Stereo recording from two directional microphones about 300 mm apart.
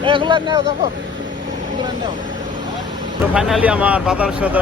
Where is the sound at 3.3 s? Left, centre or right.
Centre.